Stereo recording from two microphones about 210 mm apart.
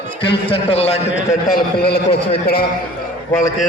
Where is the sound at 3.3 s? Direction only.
35° left (ahead or behind).